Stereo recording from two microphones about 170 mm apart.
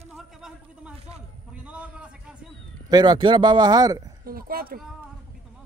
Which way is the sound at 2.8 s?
25° right (ahead or behind).